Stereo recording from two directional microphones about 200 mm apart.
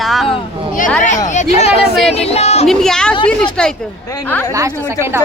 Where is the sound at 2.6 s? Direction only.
Centre (ahead or behind).